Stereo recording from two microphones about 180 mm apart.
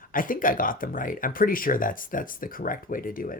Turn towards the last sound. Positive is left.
turn(degrees=50)  # may be behind; listen again after turning